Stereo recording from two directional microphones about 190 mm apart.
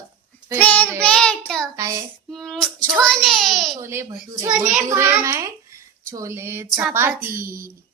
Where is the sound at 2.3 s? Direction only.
Centre (ahead or behind).